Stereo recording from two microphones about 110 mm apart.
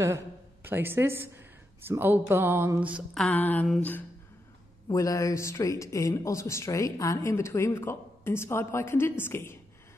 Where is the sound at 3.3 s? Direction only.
15° left (ahead or behind).